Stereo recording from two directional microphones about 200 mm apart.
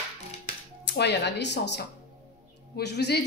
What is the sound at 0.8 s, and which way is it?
Speech, 60° left (ahead or behind).